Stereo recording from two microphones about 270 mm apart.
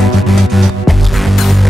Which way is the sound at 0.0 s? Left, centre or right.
Centre.